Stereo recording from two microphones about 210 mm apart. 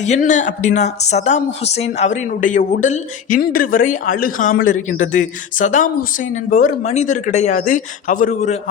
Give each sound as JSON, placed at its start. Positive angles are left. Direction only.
{"t": 0.0, "sound": "speech", "side_deg": 35}